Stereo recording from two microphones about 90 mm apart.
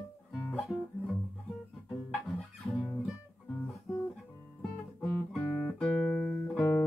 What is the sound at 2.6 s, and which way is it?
Guitar, centre (ahead or behind).